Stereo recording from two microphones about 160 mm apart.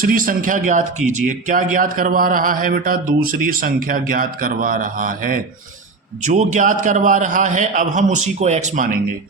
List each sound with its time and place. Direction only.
0.0 s speech: 60° right (ahead or behind)
6.2 s a man's voice: 50° right (ahead or behind)